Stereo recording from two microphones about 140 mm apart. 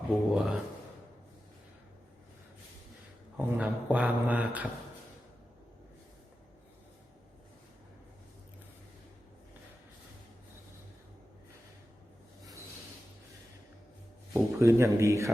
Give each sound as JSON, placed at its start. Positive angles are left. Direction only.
{"t": 0.1, "sound": "speech", "side_deg": 0}
{"t": 3.3, "sound": "speech", "side_deg": -10}
{"t": 14.3, "sound": "speech", "side_deg": -20}